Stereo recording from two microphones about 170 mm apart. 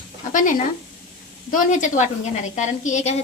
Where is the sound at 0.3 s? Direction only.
50° left (ahead or behind).